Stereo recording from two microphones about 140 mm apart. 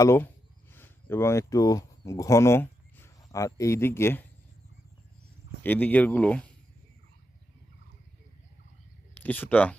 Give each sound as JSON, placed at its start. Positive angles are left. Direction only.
{"t": 0.0, "sound": "speech", "side_deg": 20}
{"t": 5.6, "sound": "speech", "side_deg": 10}
{"t": 9.1, "sound": "speech", "side_deg": 15}